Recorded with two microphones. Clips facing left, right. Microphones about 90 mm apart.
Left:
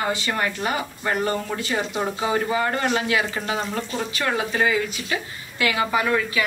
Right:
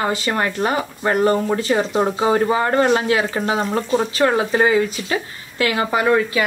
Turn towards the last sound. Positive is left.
turn(degrees=-35)  # may be behind; listen again after turning